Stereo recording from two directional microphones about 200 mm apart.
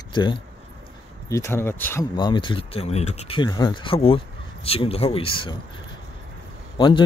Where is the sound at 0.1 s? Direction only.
25° left (ahead or behind).